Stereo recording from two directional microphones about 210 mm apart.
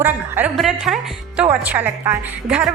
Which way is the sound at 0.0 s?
10° right (ahead or behind).